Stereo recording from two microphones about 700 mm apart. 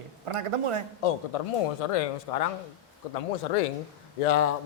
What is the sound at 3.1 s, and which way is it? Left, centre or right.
Speech, left.